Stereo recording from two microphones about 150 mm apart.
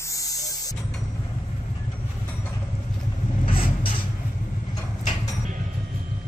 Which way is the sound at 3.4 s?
35° left (ahead or behind).